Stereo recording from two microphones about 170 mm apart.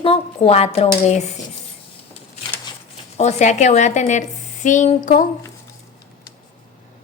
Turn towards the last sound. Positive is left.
turn(degrees=50)  # may be behind; listen again after turning